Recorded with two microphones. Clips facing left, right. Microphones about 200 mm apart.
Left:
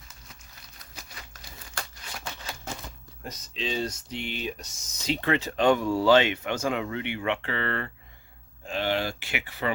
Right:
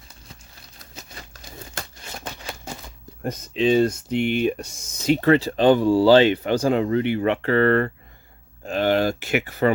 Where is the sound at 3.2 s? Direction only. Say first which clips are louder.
Right 13 dB; 55° right (ahead or behind).